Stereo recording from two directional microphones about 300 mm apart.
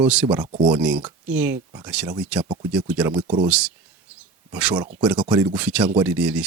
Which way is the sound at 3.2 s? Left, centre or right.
Centre.